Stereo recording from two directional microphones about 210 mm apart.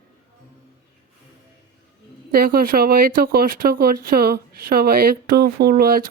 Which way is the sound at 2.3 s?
45° right (ahead or behind).